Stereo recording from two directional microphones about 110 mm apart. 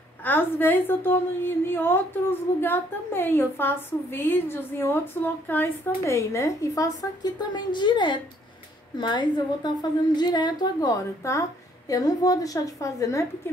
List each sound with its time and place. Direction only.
0.2 s a woman's voice: 20° left (ahead or behind)
7.2 s a woman's voice: 45° left (ahead or behind)